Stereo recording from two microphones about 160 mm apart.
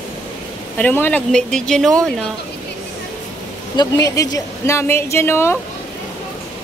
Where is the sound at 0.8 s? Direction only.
10° left (ahead or behind).